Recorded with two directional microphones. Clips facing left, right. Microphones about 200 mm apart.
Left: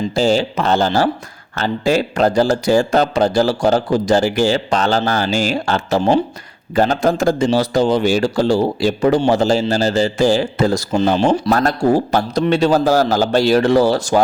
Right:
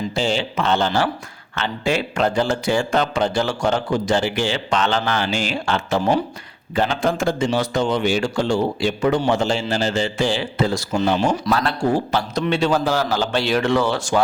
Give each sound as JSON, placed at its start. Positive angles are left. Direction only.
{"t": 0.1, "sound": "a man's voice", "side_deg": 40}
{"t": 11.2, "sound": "a man's voice", "side_deg": 30}
{"t": 11.5, "sound": "a man's voice", "side_deg": 40}